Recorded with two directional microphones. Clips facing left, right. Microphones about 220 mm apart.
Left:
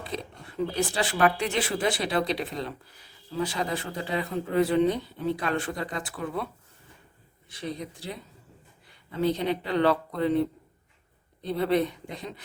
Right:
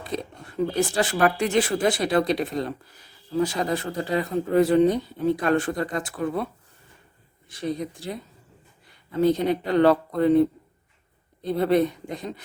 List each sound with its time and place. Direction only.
0.0 s speech: 45° right (ahead or behind)
7.5 s speech: 45° right (ahead or behind)
9.2 s speech: 45° right (ahead or behind)
11.5 s speech: 45° right (ahead or behind)